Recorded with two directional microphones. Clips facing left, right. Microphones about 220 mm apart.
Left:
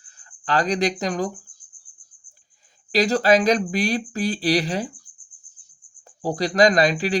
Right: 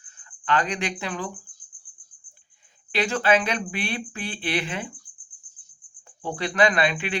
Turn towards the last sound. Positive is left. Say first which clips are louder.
# left 5 dB
turn(degrees=35)  # may be behind; listen again after turning